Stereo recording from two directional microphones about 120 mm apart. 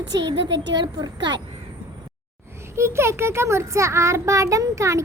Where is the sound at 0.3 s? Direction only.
40° right (ahead or behind).